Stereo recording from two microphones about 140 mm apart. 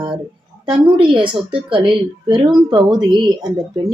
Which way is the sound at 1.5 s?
35° right (ahead or behind).